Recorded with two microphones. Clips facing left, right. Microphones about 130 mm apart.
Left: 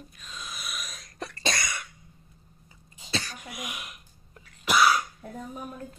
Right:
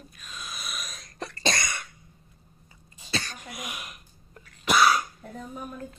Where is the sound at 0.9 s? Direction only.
5° left (ahead or behind).